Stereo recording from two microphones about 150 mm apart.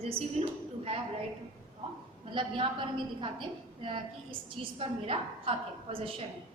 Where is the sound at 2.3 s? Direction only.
35° right (ahead or behind).